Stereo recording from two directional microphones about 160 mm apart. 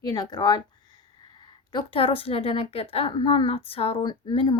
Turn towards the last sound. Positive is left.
turn(degrees=30)  # may be behind; listen again after turning